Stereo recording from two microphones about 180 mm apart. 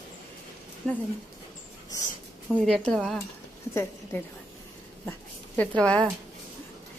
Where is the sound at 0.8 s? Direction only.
5° left (ahead or behind).